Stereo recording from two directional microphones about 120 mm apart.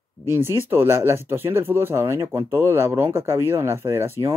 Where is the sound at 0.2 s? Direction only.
20° right (ahead or behind).